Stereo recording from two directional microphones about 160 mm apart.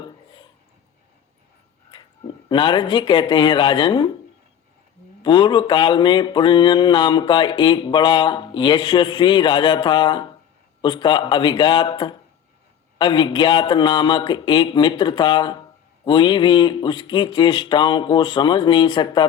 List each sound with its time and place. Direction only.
0.0 s a sound: 30° left (ahead or behind)
1.9 s speech: 30° left (ahead or behind)
5.2 s mantra: 30° left (ahead or behind)